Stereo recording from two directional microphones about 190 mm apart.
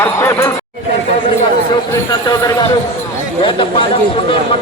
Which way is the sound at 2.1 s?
20° left (ahead or behind).